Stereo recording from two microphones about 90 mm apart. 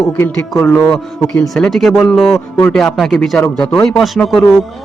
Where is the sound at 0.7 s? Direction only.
5° left (ahead or behind).